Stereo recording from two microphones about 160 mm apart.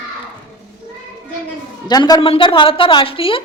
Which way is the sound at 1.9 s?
25° left (ahead or behind).